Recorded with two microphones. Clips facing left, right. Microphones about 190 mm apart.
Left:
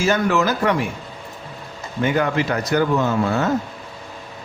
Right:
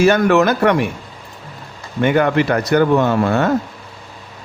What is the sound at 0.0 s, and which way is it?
Speech, 65° right (ahead or behind).